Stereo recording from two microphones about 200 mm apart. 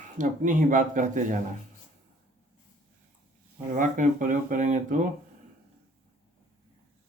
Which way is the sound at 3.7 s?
40° right (ahead or behind).